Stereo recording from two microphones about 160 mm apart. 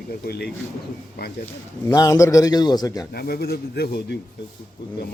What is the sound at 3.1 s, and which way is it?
Speech, 75° left (ahead or behind).